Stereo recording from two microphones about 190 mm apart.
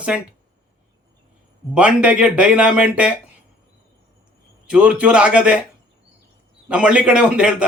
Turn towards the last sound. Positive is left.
turn(degrees=-5)  # may be behind; listen again after turning